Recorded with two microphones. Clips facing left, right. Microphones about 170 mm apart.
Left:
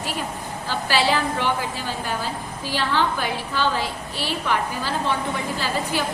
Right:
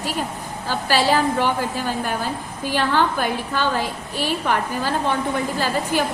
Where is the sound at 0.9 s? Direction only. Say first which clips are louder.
Right 3 dB; 40° right (ahead or behind).